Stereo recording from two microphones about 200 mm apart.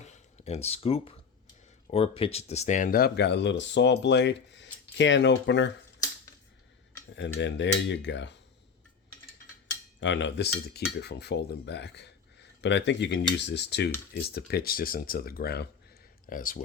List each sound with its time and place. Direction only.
0.0 s a sound: 35° left (ahead or behind)
1.9 s speech: 30° left (ahead or behind); by 5.7 s 60° left (ahead or behind)
7.2 s speech: 65° left (ahead or behind)
10.0 s speech: 65° left (ahead or behind); by 16.6 s 45° left (ahead or behind)